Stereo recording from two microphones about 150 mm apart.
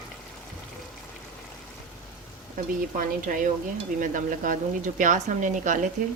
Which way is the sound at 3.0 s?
65° right (ahead or behind).